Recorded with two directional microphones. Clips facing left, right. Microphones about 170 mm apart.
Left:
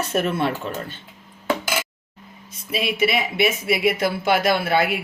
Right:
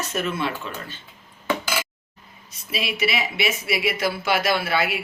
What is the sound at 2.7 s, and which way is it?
Speech, 50° left (ahead or behind).